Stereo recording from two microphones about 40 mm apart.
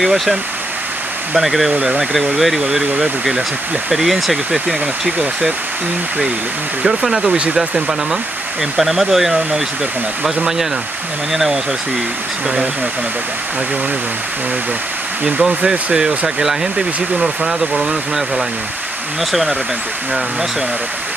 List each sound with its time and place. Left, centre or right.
0.0 s speech: centre
1.7 s speech: right
2.0 s speech: centre
6.8 s speech: centre
16.3 s speech: centre